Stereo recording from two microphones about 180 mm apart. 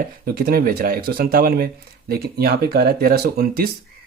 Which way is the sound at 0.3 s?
55° right (ahead or behind).